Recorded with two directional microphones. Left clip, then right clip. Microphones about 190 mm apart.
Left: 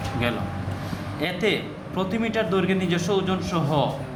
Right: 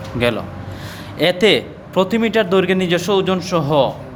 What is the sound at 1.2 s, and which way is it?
A man's voice, 60° right (ahead or behind).